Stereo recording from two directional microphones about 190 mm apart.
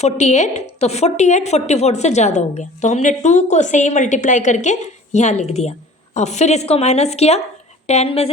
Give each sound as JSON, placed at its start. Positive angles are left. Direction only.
{"t": 0.0, "sound": "a woman's voice", "side_deg": 35}